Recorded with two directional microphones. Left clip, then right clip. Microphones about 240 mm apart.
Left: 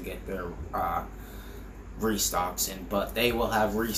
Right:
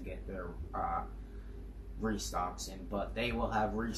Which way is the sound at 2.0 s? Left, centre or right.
Centre.